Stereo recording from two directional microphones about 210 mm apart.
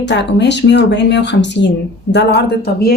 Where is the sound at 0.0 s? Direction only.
55° left (ahead or behind).